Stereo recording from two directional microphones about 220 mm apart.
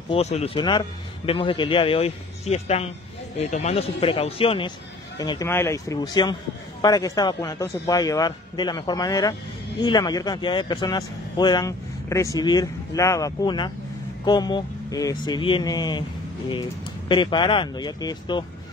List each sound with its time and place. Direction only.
0.1 s a man's voice: 30° left (ahead or behind)